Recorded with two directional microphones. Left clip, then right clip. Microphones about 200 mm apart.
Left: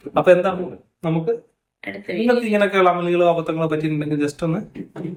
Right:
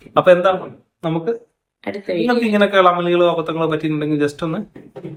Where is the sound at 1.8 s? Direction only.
25° right (ahead or behind).